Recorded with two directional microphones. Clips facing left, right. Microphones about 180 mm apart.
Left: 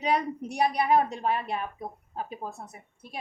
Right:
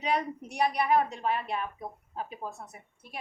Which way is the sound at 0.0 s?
35° left (ahead or behind).